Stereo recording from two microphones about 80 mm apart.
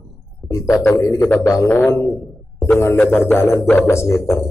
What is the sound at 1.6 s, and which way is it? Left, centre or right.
A man's voice, left.